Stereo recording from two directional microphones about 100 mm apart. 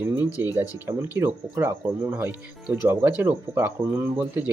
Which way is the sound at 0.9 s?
20° right (ahead or behind).